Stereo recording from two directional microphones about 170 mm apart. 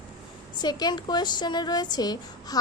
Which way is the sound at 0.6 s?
25° left (ahead or behind).